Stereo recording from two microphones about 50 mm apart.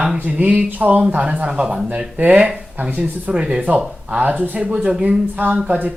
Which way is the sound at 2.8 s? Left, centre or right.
Right.